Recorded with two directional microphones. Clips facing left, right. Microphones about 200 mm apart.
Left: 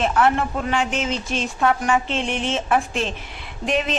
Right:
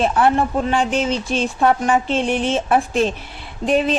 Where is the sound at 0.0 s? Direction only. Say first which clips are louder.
Right 3 dB; 30° right (ahead or behind).